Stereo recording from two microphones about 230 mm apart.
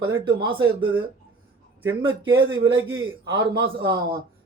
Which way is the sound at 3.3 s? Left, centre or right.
Centre.